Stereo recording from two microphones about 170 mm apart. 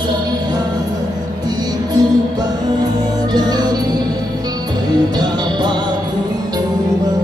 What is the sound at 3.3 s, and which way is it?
Music, 25° right (ahead or behind).